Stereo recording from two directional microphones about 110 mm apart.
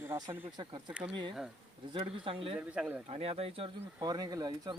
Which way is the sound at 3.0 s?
65° right (ahead or behind).